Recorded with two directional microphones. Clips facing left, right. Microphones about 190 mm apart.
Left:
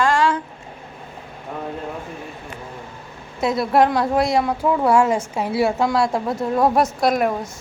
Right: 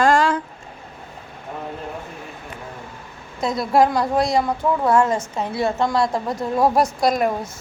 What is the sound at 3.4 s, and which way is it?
A woman's voice, 5° left (ahead or behind).